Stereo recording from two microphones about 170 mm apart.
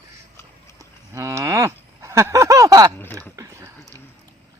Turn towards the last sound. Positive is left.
turn(degrees=-20)  # may be behind; listen again after turning